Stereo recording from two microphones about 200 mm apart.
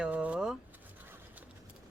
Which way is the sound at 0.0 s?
5° right (ahead or behind).